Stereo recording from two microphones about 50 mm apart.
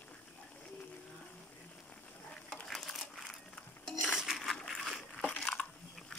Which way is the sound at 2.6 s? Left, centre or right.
Centre.